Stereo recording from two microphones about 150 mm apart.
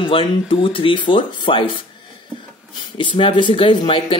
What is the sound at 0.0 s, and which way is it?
Speech, 35° left (ahead or behind).